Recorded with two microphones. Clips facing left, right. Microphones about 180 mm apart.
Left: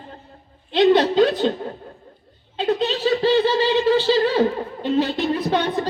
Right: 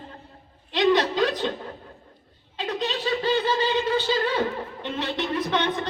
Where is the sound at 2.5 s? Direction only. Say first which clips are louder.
Left 7 dB; 30° left (ahead or behind).